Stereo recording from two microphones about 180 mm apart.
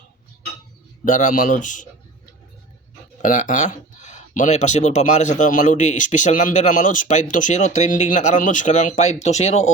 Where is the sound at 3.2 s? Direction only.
45° left (ahead or behind).